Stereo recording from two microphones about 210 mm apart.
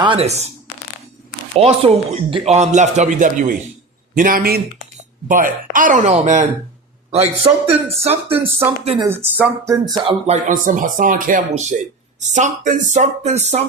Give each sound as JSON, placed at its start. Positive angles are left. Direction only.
{"t": 0.0, "sound": "speech", "side_deg": -25}
{"t": 1.6, "sound": "a man's voice", "side_deg": -25}
{"t": 8.4, "sound": "speech", "side_deg": -10}
{"t": 8.8, "sound": "speech", "side_deg": -30}
{"t": 9.0, "sound": "speech", "side_deg": -10}
{"t": 10.2, "sound": "speech", "side_deg": -35}